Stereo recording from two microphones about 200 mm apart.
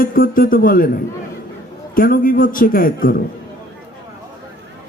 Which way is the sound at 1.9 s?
45° left (ahead or behind).